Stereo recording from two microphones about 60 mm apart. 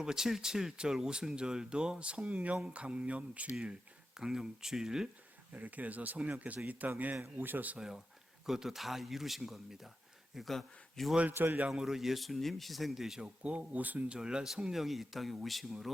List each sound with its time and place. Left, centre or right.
0.0 s speech: centre
4.1 s speech: centre
5.5 s speech: right
7.2 s a man's voice: right
7.8 s a man's voice: centre
11.2 s a man's voice: right
11.7 s speech: centre
13.2 s speech: centre
14.2 s speech: centre